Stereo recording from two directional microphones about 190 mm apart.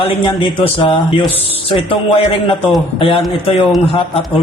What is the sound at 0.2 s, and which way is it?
Speech, 25° left (ahead or behind).